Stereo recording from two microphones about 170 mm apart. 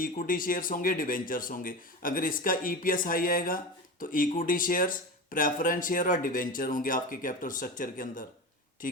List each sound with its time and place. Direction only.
0.0 s speech: 55° left (ahead or behind)